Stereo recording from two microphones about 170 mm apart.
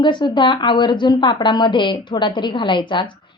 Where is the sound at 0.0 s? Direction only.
25° left (ahead or behind).